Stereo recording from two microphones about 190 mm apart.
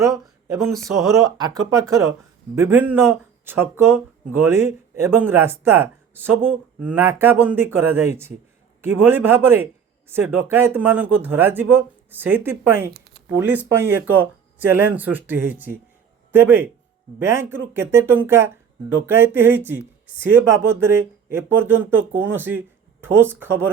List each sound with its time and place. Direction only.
0.0 s a sound: 15° right (ahead or behind)
0.8 s speech: centre (ahead or behind)
1.0 s speech: 20° right (ahead or behind)